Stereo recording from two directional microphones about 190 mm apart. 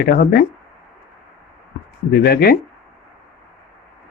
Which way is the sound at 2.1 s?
55° left (ahead or behind).